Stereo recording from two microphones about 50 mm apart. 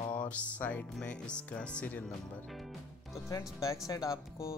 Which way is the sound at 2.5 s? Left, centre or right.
Centre.